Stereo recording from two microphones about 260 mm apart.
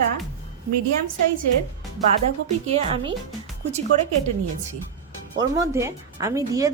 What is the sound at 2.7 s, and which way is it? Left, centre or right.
Speech, right.